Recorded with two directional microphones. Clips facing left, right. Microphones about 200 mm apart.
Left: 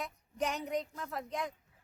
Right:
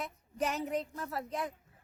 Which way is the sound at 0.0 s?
5° right (ahead or behind).